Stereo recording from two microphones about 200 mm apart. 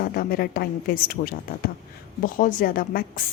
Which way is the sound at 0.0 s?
50° left (ahead or behind).